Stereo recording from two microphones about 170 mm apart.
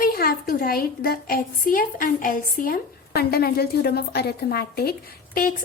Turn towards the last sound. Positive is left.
turn(degrees=60)  # may be behind; listen again after turning